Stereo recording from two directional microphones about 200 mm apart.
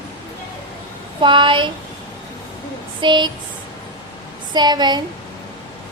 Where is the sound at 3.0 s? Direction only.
20° right (ahead or behind).